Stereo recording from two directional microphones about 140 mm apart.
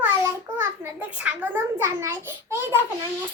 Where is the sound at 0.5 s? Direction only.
15° right (ahead or behind).